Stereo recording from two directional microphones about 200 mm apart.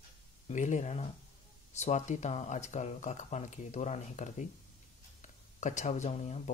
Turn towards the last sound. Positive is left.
turn(degrees=35)  # may be behind; listen again after turning